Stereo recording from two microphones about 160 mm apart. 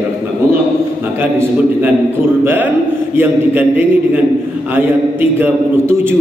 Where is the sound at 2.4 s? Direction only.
10° right (ahead or behind).